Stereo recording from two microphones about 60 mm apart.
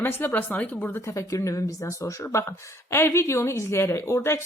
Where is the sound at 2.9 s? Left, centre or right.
Left.